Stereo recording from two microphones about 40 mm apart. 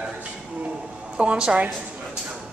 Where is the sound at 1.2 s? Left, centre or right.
Right.